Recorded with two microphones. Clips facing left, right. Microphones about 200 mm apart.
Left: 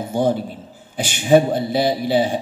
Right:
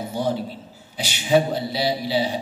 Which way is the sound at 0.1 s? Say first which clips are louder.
Left 6 dB; 50° left (ahead or behind).